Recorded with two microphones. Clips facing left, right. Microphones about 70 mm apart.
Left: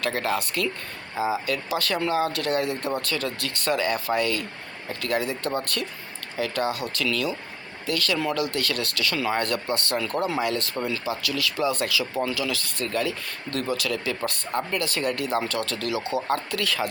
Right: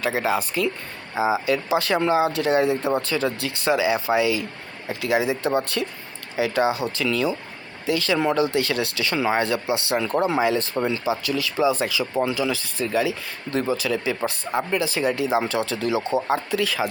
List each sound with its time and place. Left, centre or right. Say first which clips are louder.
0.0 s speech: right 3 dB; centre
15.9 s speech: right 4 dB; right
16.2 s speech: right 3 dB; centre